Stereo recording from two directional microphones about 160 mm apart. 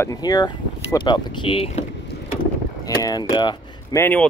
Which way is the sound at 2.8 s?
25° left (ahead or behind).